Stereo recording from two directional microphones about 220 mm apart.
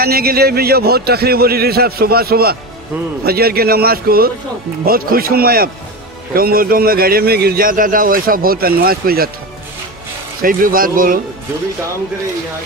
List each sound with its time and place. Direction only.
0.0 s a man's voice: 45° right (ahead or behind)
10.4 s a man's voice: 40° right (ahead or behind)